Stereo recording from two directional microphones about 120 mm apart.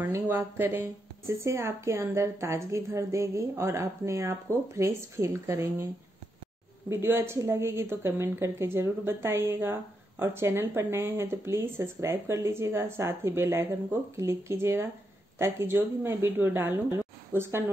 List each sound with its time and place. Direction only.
0.0 s a woman's voice: 20° right (ahead or behind)
6.9 s a woman's voice: 20° right (ahead or behind)